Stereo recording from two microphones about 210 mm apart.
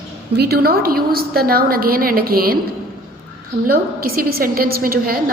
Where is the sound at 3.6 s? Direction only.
45° right (ahead or behind).